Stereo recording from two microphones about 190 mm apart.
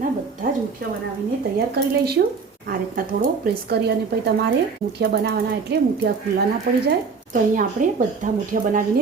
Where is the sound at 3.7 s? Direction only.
60° right (ahead or behind).